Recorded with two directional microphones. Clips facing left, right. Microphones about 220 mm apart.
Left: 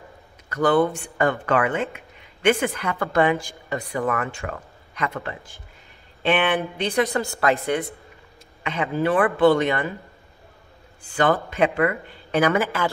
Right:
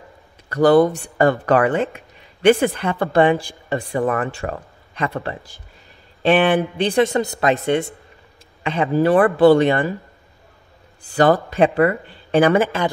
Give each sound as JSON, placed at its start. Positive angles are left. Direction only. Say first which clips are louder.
{"t": 0.5, "sound": "speech", "louder": "right 6 dB", "side_deg": -35}
{"t": 11.1, "sound": "speech", "louder": "right 5 dB", "side_deg": -35}